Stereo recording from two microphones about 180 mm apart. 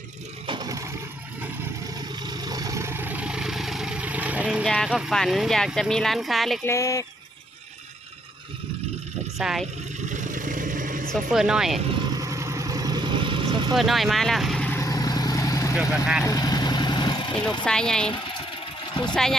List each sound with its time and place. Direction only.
0.4 s a sound: 25° right (ahead or behind)
2.0 s vehicle: 20° right (ahead or behind); by 6.6 s centre (ahead or behind)
6.7 s speech: 15° left (ahead or behind)
9.4 s speech: centre (ahead or behind)
10.1 s vehicle: 45° right (ahead or behind)
11.3 s speech: 5° right (ahead or behind)
12.1 s vehicle: 20° right (ahead or behind)
13.7 s vehicle: centre (ahead or behind); by 15.7 s 20° left (ahead or behind)
15.7 s speech: 5° right (ahead or behind)
16.2 s vehicle: 20° left (ahead or behind)
17.6 s speech: 5° left (ahead or behind)
19.1 s speech: 5° left (ahead or behind)